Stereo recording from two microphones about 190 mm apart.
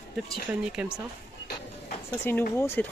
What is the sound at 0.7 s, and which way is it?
Speech, 5° right (ahead or behind).